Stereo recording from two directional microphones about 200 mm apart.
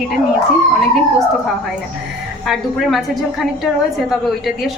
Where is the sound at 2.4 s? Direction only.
Centre (ahead or behind).